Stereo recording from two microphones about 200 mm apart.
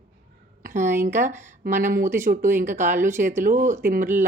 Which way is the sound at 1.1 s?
40° right (ahead or behind).